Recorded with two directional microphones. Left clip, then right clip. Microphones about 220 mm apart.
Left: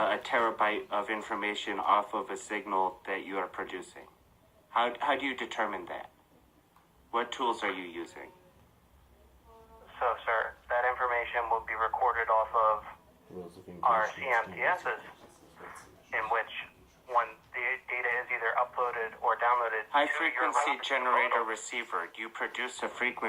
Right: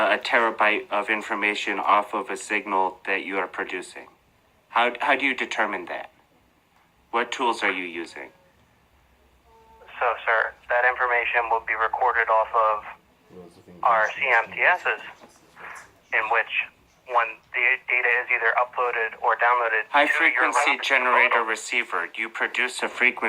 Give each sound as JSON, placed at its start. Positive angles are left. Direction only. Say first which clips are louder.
{"t": 0.0, "sound": "speech", "louder": "right 8 dB", "side_deg": -30}
{"t": 7.1, "sound": "speech", "louder": "right 7 dB", "side_deg": -30}
{"t": 9.8, "sound": "speech", "louder": "right 7 dB", "side_deg": -30}
{"t": 15.5, "sound": "a sound", "louder": "right 8 dB", "side_deg": -30}
{"t": 17.1, "sound": "speech", "louder": "right 7 dB", "side_deg": -30}